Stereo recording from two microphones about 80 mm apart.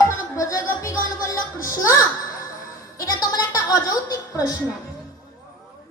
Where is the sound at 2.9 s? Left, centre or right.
Left.